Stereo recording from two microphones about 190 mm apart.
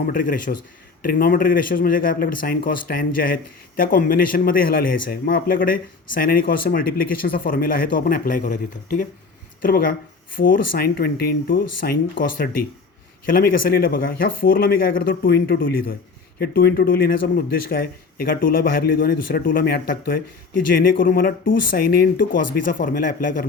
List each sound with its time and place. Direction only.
0.1 s speech: 45° left (ahead or behind)
13.2 s speech: 50° left (ahead or behind)